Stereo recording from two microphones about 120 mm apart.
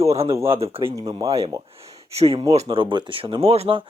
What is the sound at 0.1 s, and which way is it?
Speech, 60° right (ahead or behind).